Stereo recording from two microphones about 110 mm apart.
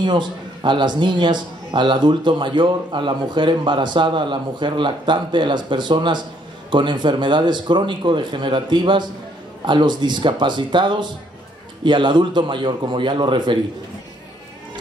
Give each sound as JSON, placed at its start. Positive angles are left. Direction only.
{"t": 0.0, "sound": "a man's voice", "side_deg": -45}